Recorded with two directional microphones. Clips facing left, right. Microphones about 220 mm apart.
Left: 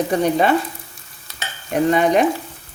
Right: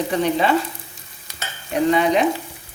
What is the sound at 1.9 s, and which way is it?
Frying, 50° left (ahead or behind).